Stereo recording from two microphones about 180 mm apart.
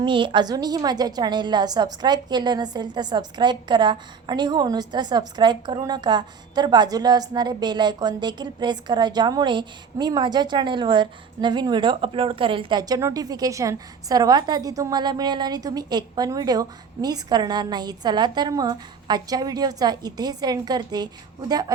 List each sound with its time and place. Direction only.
0.0 s a woman's voice: 25° right (ahead or behind)